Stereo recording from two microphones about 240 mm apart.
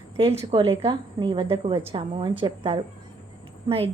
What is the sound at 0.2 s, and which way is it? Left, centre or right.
A woman's voice, right.